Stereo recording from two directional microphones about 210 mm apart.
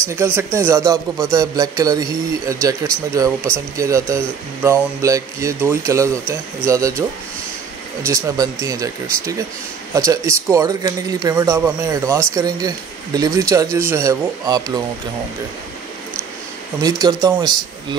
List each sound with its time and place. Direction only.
0.1 s speech: 10° right (ahead or behind)
9.9 s speech: 15° right (ahead or behind)
16.8 s speech: 15° right (ahead or behind)